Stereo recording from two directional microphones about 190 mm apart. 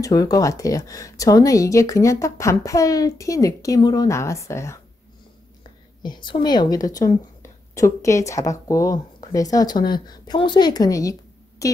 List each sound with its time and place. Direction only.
0.0 s speech: 20° left (ahead or behind)
6.0 s a woman's voice: 25° left (ahead or behind)